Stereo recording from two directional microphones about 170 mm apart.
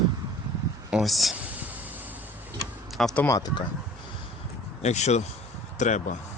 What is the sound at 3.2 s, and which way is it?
Speech, 20° left (ahead or behind).